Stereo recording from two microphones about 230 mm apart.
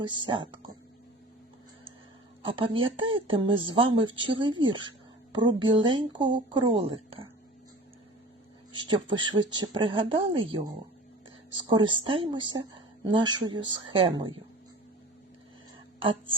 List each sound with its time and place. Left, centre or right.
0.0 s speech: right
2.4 s speech: right
8.7 s speech: right